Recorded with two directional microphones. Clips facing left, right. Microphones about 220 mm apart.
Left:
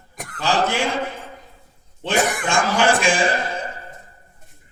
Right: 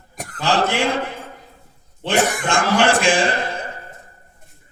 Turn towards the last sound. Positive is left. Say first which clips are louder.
# right 1 dB
turn(degrees=-60)  # may be behind; listen again after turning